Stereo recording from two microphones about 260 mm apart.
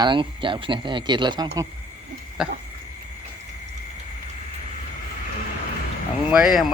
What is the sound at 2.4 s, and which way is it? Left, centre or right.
Speech, centre.